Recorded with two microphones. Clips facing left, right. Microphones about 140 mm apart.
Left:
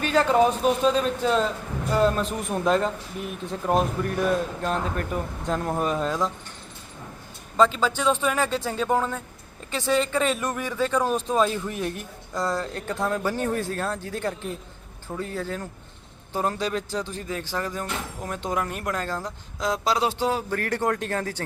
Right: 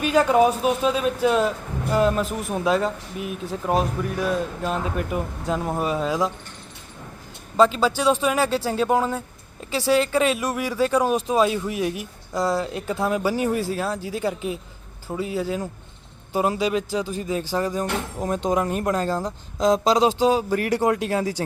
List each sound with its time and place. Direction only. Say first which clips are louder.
0.0 s speech: right 2 dB; 10° right (ahead or behind)
7.5 s speech: right 3 dB; 10° right (ahead or behind)